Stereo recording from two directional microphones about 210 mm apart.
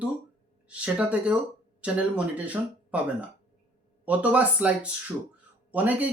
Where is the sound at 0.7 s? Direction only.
5° right (ahead or behind).